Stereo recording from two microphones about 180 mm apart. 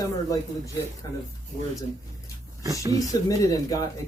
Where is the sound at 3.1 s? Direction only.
20° left (ahead or behind).